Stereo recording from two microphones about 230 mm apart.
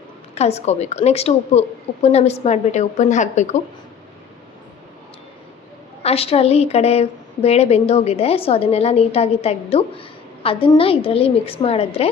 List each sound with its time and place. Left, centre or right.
0.3 s a woman's voice: left
6.0 s a woman's voice: left